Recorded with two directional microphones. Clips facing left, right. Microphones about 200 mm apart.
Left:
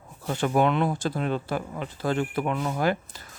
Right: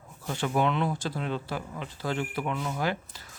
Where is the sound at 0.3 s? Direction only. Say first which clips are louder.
Left 4 dB; 50° left (ahead or behind).